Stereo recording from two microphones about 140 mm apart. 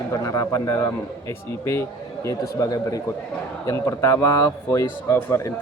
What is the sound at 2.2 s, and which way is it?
A man's voice, 25° left (ahead or behind).